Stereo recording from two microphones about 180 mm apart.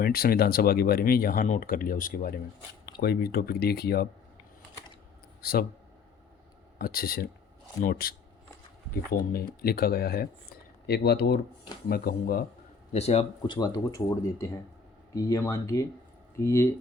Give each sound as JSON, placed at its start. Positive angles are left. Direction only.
{"t": 0.0, "sound": "speech", "side_deg": 55}
{"t": 5.4, "sound": "speech", "side_deg": 60}
{"t": 6.7, "sound": "speech", "side_deg": 55}
{"t": 9.3, "sound": "speech", "side_deg": 55}
{"t": 12.9, "sound": "a man's voice", "side_deg": 35}
{"t": 13.6, "sound": "speech", "side_deg": 20}